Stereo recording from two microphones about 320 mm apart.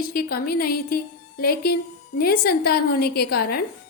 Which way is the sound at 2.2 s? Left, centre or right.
Left.